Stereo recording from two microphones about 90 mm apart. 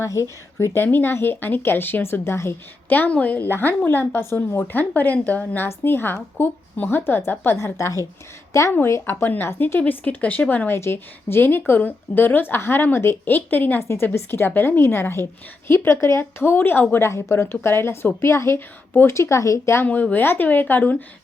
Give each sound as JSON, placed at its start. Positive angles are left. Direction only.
{"t": 0.6, "sound": "a woman's voice", "side_deg": 25}
{"t": 19.8, "sound": "a woman's voice", "side_deg": 15}